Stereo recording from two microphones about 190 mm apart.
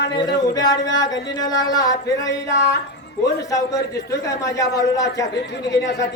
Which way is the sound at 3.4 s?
15° left (ahead or behind).